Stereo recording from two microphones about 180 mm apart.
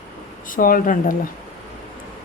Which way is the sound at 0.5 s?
50° left (ahead or behind).